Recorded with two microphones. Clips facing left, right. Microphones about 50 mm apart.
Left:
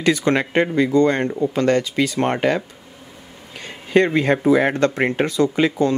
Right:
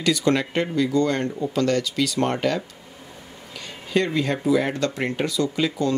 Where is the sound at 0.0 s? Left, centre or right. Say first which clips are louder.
Left 3 dB; left.